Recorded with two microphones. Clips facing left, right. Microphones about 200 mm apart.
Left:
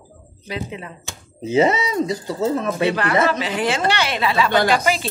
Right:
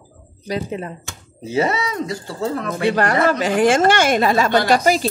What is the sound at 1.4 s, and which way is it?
Speech, 20° left (ahead or behind).